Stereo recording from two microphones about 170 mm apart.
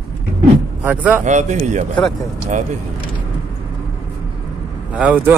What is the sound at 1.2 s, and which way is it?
Speech, 45° right (ahead or behind).